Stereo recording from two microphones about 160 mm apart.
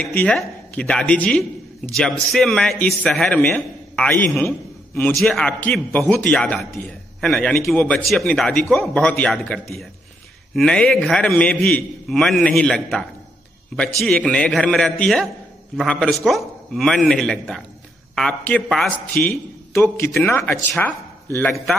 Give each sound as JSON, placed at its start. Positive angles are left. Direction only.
{"t": 0.1, "sound": "a man's voice", "side_deg": 5}
{"t": 19.2, "sound": "a man's voice", "side_deg": 15}